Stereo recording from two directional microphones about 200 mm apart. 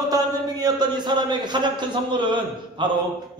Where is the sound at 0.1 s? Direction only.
20° right (ahead or behind).